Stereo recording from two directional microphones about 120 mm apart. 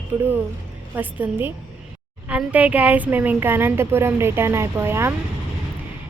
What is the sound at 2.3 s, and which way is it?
A woman's voice, 10° right (ahead or behind).